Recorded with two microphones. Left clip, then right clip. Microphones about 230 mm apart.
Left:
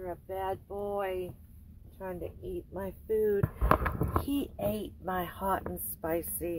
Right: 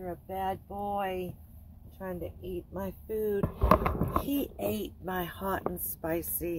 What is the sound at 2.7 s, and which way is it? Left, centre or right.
Speech, centre.